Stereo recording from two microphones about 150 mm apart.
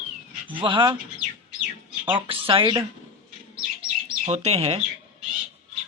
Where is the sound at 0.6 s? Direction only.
30° right (ahead or behind).